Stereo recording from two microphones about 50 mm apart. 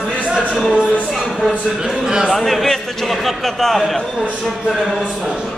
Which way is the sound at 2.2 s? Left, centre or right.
Centre.